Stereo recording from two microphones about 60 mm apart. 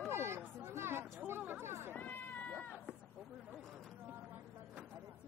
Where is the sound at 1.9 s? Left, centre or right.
Left.